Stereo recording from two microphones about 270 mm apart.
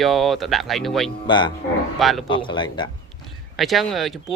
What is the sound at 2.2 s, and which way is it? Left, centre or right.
Speech, centre.